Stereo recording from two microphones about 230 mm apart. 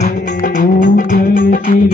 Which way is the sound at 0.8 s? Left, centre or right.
Left.